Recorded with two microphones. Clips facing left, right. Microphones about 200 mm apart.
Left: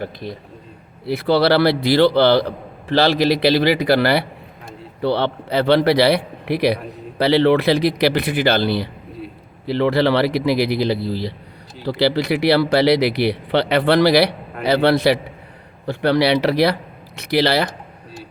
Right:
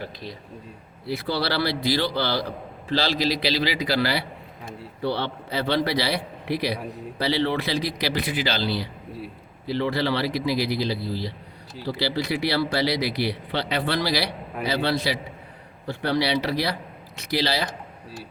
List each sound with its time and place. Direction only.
0.0 s a man's voice: 55° left (ahead or behind)
1.0 s speech: 65° left (ahead or behind)
9.6 s speech: 70° left (ahead or behind)